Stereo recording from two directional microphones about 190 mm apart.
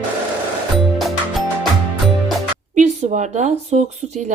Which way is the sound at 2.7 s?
40° right (ahead or behind).